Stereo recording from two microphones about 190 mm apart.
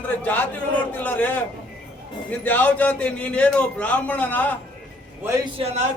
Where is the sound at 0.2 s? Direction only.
10° left (ahead or behind).